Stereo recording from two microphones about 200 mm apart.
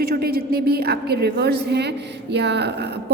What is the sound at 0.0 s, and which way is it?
A woman's voice, 50° right (ahead or behind).